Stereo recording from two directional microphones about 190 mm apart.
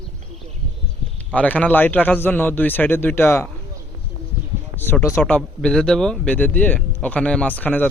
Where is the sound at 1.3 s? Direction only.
10° left (ahead or behind).